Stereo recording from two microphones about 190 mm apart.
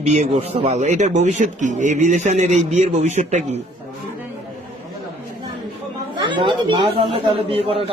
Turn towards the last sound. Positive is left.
turn(degrees=-30)  # may be behind; listen again after turning